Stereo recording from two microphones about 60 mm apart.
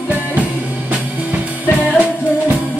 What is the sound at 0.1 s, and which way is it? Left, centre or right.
Music, right.